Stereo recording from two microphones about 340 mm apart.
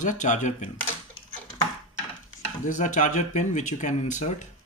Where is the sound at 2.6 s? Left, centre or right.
Left.